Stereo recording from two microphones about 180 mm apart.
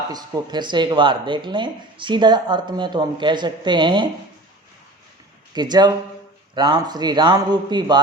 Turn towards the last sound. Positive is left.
turn(degrees=-25)  # may be behind; listen again after turning